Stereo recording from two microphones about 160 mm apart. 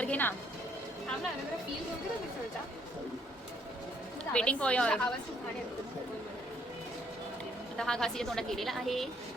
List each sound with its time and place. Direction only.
0.0 s music: 10° left (ahead or behind)
4.3 s a woman's voice: 5° left (ahead or behind)
7.8 s a woman's voice: 5° left (ahead or behind)